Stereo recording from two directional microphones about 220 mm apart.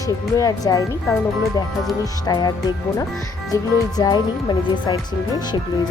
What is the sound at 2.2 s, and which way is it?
Speech, 20° left (ahead or behind).